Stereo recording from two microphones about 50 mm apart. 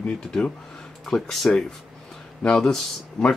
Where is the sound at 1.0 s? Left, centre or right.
Centre.